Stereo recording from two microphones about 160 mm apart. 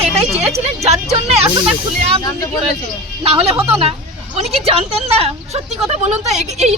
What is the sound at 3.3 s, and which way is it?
A woman's voice, 35° right (ahead or behind).